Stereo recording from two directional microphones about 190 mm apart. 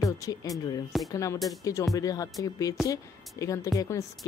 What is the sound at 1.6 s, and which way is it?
Speech, 15° left (ahead or behind).